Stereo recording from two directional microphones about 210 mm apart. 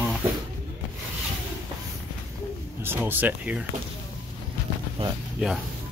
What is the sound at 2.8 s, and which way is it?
Speech, 10° right (ahead or behind).